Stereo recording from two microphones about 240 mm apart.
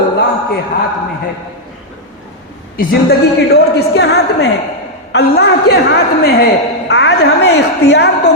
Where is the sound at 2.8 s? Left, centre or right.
Left.